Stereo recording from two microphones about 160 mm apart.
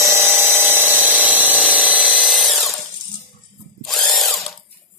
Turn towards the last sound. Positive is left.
turn(degrees=0)  # may be behind; listen again after turning